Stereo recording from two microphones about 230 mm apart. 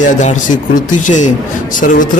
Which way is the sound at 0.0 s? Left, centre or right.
Left.